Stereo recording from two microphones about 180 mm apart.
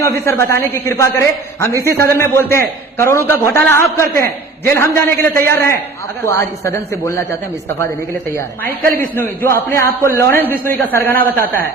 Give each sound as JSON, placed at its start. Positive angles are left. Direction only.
{"t": 0.0, "sound": "a man's voice", "side_deg": 15}
{"t": 9.0, "sound": "a man's voice", "side_deg": 10}